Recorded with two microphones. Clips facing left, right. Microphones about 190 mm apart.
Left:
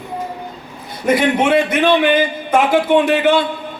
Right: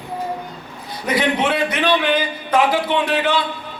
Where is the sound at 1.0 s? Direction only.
50° left (ahead or behind).